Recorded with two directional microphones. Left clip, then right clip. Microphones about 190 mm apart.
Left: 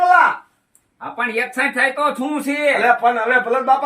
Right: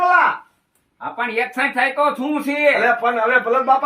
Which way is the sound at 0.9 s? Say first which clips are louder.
Even; 20° left (ahead or behind).